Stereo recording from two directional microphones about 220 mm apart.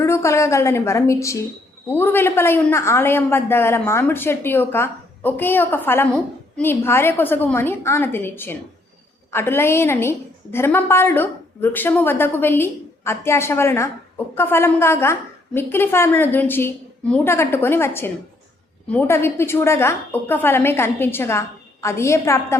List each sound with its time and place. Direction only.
0.0 s a woman's voice: 10° left (ahead or behind)